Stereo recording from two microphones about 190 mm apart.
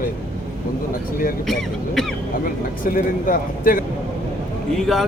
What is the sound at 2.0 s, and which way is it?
Speech, centre (ahead or behind).